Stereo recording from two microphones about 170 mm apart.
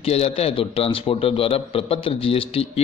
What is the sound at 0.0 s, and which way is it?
A man's voice, 35° left (ahead or behind).